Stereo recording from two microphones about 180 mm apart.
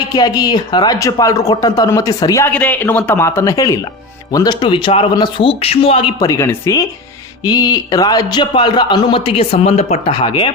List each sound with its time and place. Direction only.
0.1 s speech: 20° left (ahead or behind)